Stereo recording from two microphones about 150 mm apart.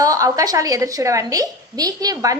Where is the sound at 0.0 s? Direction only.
25° right (ahead or behind).